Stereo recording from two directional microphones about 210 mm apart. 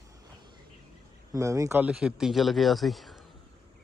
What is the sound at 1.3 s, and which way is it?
Speech, 15° right (ahead or behind).